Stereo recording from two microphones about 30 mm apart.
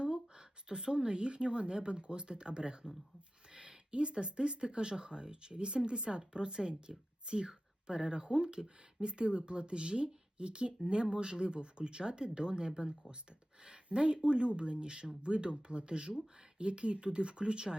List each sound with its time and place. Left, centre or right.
0.0 s speech: right